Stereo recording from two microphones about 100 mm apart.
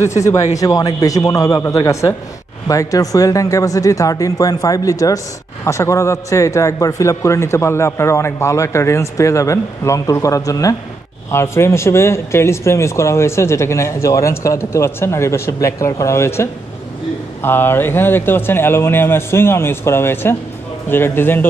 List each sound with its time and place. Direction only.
0.0 s speech: 30° left (ahead or behind)